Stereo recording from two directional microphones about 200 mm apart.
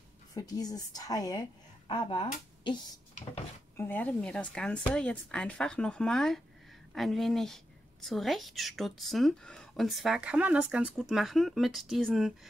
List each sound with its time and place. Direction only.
0.3 s speech: 20° left (ahead or behind)
3.7 s a woman's voice: 10° left (ahead or behind)